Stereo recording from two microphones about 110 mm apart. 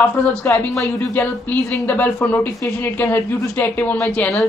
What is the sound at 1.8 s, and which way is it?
Speech, 15° left (ahead or behind).